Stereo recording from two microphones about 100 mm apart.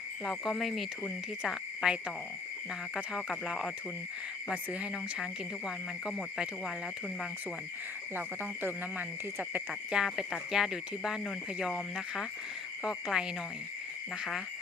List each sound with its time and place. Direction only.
0.3 s speech: centre (ahead or behind)
5.2 s speech: centre (ahead or behind)
8.6 s speech: 20° right (ahead or behind)
9.9 s speech: 5° right (ahead or behind)
12.8 s speech: 5° right (ahead or behind)